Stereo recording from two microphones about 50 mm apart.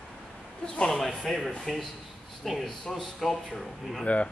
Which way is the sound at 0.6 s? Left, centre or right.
Centre.